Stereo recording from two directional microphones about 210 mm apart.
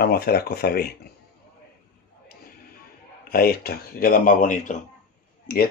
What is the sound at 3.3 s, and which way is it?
Speech, 45° left (ahead or behind).